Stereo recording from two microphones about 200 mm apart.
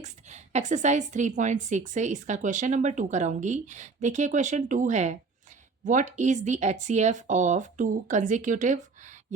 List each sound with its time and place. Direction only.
0.0 s a woman's voice: 35° right (ahead or behind)